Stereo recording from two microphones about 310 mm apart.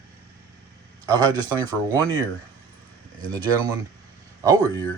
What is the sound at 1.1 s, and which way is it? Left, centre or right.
Speech, centre.